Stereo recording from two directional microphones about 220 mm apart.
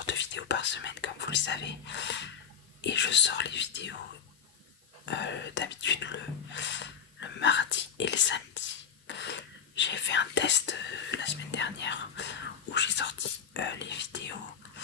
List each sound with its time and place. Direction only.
0.0 s whispering: 55° left (ahead or behind)
2.8 s speech: 55° left (ahead or behind)
5.0 s speech: 55° left (ahead or behind)